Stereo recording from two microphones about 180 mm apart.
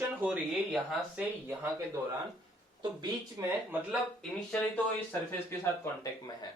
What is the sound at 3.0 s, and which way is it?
Speech, 15° right (ahead or behind).